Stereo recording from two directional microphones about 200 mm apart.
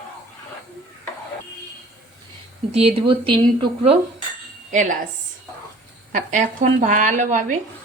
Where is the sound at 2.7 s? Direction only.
30° right (ahead or behind).